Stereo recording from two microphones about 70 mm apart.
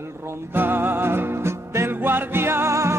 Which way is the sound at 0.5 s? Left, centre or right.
Right.